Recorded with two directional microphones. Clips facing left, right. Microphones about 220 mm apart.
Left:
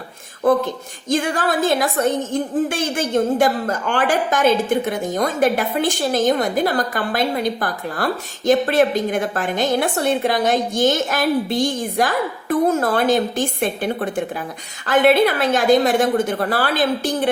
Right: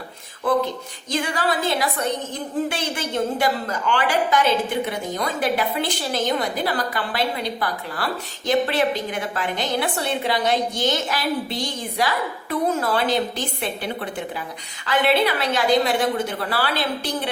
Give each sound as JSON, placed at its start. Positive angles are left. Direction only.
{"t": 0.4, "sound": "a woman's voice", "side_deg": 45}